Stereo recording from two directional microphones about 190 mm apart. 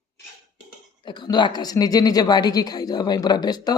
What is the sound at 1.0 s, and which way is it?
Speech, 25° left (ahead or behind).